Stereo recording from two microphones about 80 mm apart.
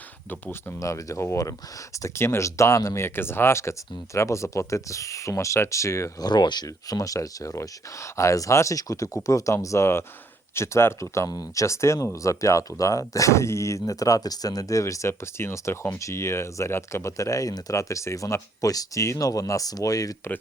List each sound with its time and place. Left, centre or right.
0.8 s speech: left
6.2 s speech: left